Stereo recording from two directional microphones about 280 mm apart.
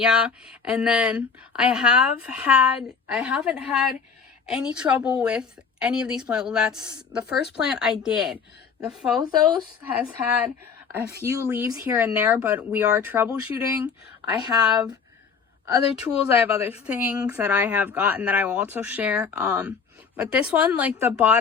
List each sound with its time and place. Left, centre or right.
0.0 s a woman's voice: centre
7.3 s speech: left
7.5 s a woman's voice: centre